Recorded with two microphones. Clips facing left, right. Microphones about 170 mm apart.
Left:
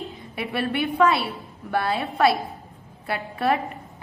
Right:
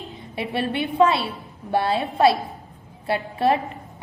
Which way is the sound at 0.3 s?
25° right (ahead or behind).